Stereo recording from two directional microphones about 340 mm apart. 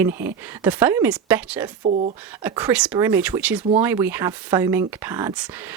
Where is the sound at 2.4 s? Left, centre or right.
Centre.